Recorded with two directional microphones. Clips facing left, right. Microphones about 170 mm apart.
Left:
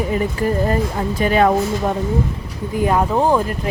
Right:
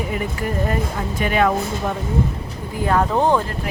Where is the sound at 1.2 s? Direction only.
35° left (ahead or behind).